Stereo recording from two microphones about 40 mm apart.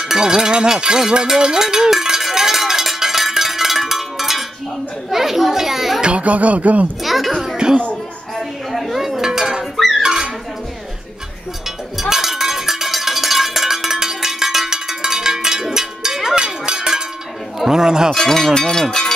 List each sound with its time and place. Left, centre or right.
0.0 s cowbell: centre
5.1 s children playing: centre
6.0 s speech: right
7.0 s children playing: centre
7.5 s music: right
8.4 s dishes: centre
9.8 s music: centre
10.0 s dog: centre
12.0 s cowbell: centre
17.6 s speech: centre
18.1 s cowbell: centre